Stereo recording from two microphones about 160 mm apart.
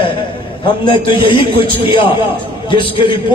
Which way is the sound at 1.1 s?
35° left (ahead or behind).